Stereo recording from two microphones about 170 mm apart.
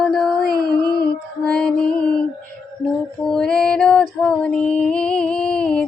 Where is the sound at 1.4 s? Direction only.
5° left (ahead or behind).